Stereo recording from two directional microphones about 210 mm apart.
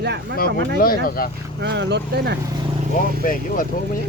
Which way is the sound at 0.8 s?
45° left (ahead or behind).